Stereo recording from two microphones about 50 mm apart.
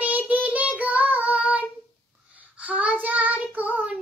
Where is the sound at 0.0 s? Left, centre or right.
Right.